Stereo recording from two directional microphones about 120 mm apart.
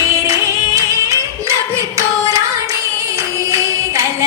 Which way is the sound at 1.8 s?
25° right (ahead or behind).